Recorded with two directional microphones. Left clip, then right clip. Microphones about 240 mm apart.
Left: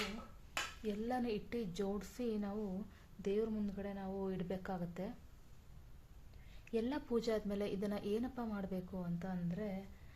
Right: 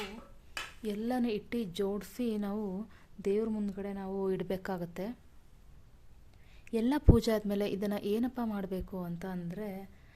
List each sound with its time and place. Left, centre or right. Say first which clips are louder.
0.9 s a woman's voice: right 8 dB; right
6.7 s a woman's voice: right 9 dB; right